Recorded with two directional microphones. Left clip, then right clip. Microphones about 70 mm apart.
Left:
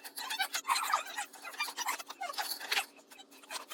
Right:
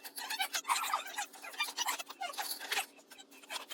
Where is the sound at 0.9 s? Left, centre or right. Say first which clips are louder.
Left 3 dB; centre.